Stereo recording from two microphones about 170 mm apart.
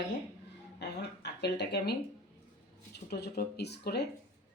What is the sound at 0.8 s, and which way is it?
Speech, 80° left.